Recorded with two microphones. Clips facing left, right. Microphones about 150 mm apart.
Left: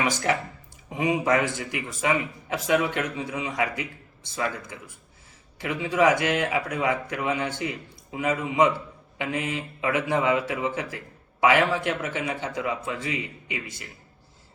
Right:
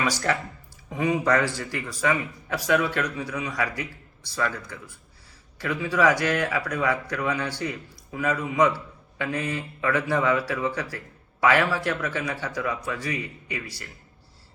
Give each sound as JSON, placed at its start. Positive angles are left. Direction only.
{"t": 0.0, "sound": "speech", "side_deg": 20}